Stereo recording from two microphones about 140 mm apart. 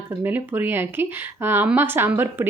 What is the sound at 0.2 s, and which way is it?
Speech, 15° right (ahead or behind).